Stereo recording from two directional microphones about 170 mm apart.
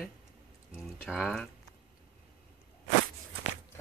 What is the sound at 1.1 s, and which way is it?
Speech, 5° right (ahead or behind).